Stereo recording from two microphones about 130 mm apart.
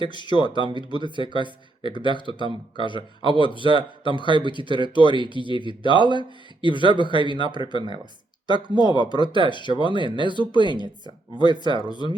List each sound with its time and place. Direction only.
0.0 s speech: 35° left (ahead or behind)
8.8 s speech: 35° left (ahead or behind)